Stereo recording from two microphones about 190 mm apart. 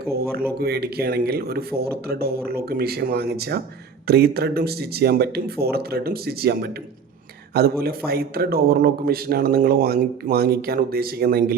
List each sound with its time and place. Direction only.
0.0 s speech: 55° right (ahead or behind)